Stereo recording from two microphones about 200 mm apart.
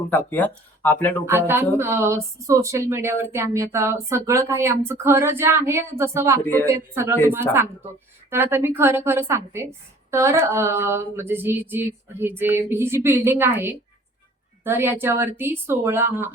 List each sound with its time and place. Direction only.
0.1 s speech: 10° left (ahead or behind)
1.2 s speech: 10° right (ahead or behind)
6.4 s speech: 10° left (ahead or behind)
6.7 s speech: 15° right (ahead or behind)
8.3 s speech: 10° right (ahead or behind)